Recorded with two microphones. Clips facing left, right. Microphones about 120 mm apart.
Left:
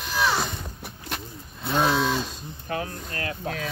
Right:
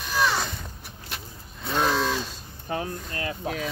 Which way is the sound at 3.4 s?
15° right (ahead or behind).